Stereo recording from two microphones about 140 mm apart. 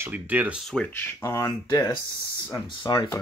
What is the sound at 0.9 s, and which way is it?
Speech, 15° left (ahead or behind).